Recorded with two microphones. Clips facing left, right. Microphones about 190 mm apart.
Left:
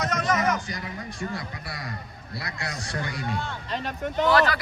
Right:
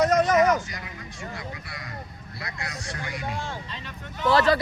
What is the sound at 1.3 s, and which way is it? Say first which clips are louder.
A man's voice: left 2 dB; 40° left (ahead or behind).